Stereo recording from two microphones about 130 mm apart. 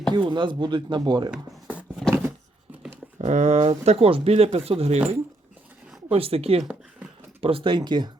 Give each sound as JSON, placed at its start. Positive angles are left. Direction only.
{"t": 0.1, "sound": "speech", "side_deg": -40}
{"t": 1.3, "sound": "a sound", "side_deg": -5}
{"t": 3.2, "sound": "speech", "side_deg": -60}
{"t": 6.1, "sound": "speech", "side_deg": -45}
{"t": 6.6, "sound": "a sound", "side_deg": -5}
{"t": 7.4, "sound": "speech", "side_deg": -40}